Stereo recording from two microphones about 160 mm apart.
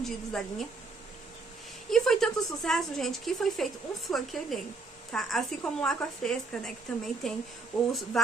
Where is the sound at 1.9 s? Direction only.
Centre (ahead or behind).